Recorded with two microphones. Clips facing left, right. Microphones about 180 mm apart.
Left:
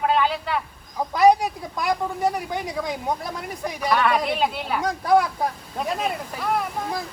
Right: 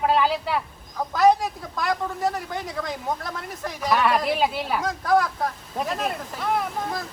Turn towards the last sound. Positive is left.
turn(degrees=0)  # may be behind; listen again after turning